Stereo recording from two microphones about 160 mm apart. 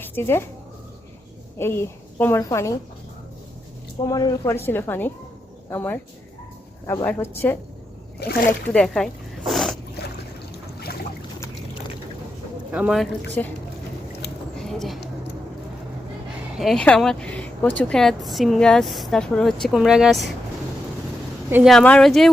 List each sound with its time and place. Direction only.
0.0 s speech: 15° left (ahead or behind)
1.5 s a woman's voice: 15° left (ahead or behind)
4.0 s a woman's voice: 25° left (ahead or behind)
8.2 s speech: 65° left (ahead or behind)
8.7 s a woman's voice: 5° left (ahead or behind)
9.5 s a sound: centre (ahead or behind)
12.7 s a woman's voice: 5° right (ahead or behind)
13.4 s a woman's voice: 10° left (ahead or behind)
14.6 s a sound: centre (ahead or behind)
16.6 s a woman's voice: centre (ahead or behind)
21.7 s a woman's voice: 5° left (ahead or behind)